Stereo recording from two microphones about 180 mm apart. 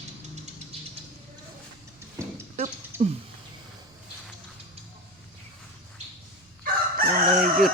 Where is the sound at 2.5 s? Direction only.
40° right (ahead or behind).